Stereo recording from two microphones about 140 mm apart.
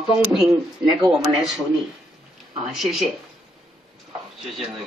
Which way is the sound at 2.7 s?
Centre (ahead or behind).